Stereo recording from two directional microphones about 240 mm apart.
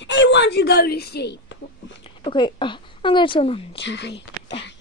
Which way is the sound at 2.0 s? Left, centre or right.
Left.